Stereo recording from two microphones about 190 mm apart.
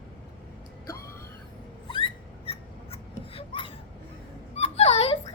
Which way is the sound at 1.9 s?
30° left (ahead or behind).